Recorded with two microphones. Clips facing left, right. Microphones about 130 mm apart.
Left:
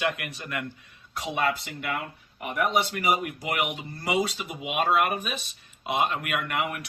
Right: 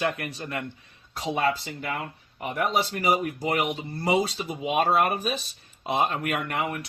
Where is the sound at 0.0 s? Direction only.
35° right (ahead or behind).